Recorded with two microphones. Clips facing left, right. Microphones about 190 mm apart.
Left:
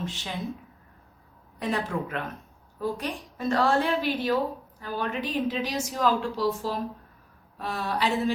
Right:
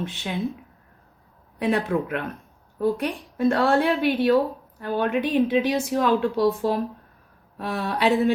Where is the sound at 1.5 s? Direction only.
60° right (ahead or behind).